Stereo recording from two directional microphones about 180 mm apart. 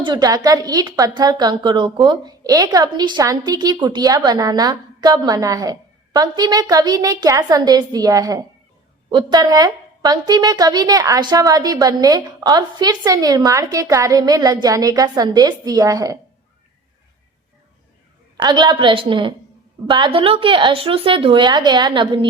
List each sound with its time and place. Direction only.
0.0 s a woman's voice: 20° right (ahead or behind)
18.4 s a woman's voice: 25° right (ahead or behind)